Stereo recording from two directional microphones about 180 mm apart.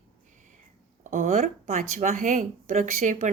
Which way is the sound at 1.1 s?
40° right (ahead or behind).